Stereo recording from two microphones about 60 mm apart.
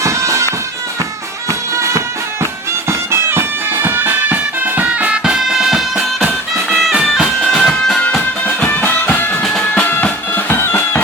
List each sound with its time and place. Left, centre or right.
0.0 s bagpipes: right
1.5 s music: right
3.1 s music: right
4.9 s music: right
5.2 s music: centre
7.4 s bagpipes: centre
8.4 s music: left
9.4 s music: centre
9.8 s music: left